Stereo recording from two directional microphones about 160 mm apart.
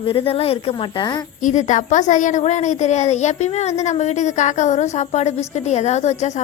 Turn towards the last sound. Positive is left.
turn(degrees=45)  # may be behind; listen again after turning